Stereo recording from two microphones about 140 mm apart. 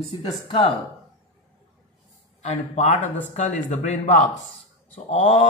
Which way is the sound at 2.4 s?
55° left (ahead or behind).